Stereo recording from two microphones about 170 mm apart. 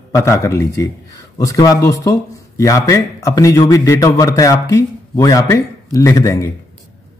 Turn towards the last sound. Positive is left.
turn(degrees=20)  # may be behind; listen again after turning